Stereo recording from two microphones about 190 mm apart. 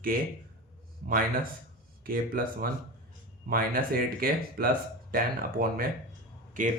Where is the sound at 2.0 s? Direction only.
50° right (ahead or behind).